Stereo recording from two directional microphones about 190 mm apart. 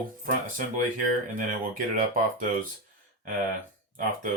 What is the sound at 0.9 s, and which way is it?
Speech, 45° right (ahead or behind).